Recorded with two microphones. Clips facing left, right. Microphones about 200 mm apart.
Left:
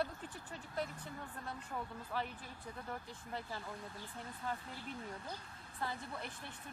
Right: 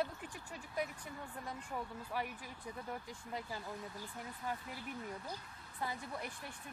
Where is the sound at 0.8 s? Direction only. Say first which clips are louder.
Right 1 dB; 10° right (ahead or behind).